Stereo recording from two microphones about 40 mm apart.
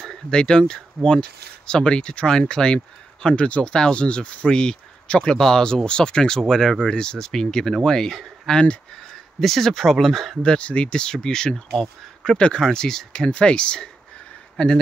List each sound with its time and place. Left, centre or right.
0.0 s speech: centre
10.4 s speech: left